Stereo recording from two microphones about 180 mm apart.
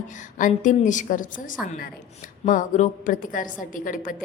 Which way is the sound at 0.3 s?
45° left (ahead or behind).